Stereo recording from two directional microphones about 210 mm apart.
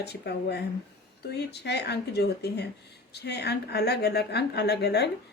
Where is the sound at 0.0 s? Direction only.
50° left (ahead or behind).